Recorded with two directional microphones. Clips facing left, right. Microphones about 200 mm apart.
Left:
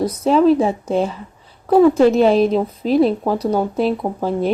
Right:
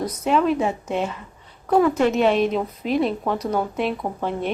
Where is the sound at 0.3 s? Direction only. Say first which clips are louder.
Left 6 dB; 35° left (ahead or behind).